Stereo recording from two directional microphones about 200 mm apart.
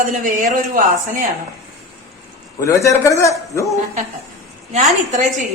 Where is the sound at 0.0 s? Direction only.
40° right (ahead or behind).